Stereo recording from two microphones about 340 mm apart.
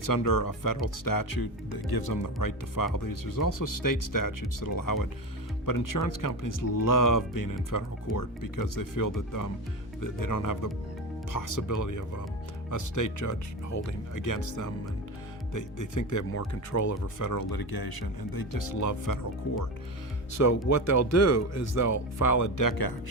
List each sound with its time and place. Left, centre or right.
0.0 s speech: left
20.3 s speech: left